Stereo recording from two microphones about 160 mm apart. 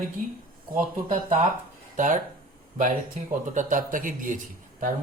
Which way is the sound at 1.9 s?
55° right (ahead or behind).